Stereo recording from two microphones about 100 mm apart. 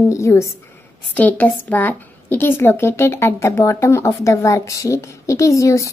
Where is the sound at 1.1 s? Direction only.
15° left (ahead or behind).